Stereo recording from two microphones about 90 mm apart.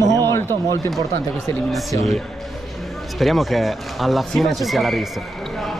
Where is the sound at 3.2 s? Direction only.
Centre (ahead or behind).